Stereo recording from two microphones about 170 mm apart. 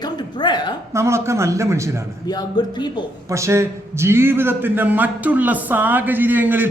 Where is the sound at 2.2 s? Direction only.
25° left (ahead or behind).